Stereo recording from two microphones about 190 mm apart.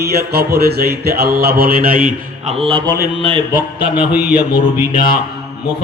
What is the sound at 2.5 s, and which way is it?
Mantra, 30° right (ahead or behind).